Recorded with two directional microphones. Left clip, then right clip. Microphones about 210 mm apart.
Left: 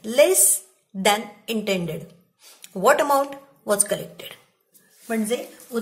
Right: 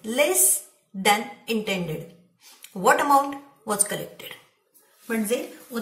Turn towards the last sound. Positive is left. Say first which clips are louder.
# even
turn(degrees=45)  # may be behind; listen again after turning